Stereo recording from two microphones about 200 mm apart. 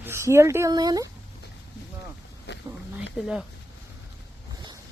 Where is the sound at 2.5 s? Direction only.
60° left (ahead or behind).